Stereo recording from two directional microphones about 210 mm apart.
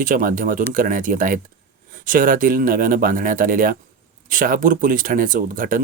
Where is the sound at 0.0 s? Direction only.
40° right (ahead or behind).